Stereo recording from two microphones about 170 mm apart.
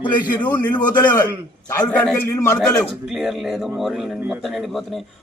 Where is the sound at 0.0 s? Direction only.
25° left (ahead or behind).